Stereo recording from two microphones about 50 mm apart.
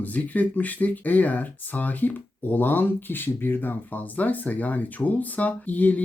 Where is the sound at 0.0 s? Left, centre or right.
Left.